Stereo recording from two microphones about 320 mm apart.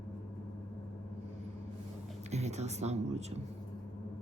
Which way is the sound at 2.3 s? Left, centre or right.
Right.